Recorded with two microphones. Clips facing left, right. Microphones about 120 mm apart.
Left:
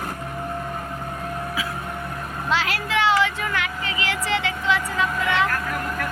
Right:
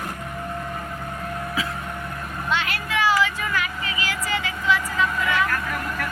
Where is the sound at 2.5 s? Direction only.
90° left.